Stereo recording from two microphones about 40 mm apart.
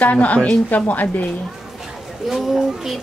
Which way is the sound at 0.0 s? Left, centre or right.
Left.